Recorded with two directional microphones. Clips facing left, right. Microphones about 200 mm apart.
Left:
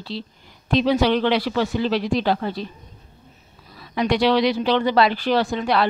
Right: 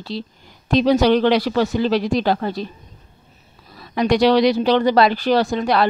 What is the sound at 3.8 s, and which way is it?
A woman's voice, 45° right (ahead or behind).